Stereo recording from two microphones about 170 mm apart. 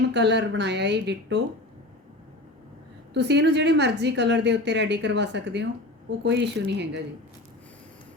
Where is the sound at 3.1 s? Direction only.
90° right.